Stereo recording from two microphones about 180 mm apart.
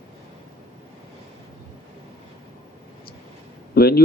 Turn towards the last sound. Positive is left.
turn(degrees=60)  # may be behind; listen again after turning